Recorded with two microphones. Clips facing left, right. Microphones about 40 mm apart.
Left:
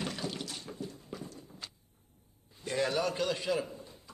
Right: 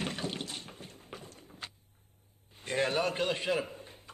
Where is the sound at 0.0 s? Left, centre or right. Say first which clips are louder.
Right 1 dB; right.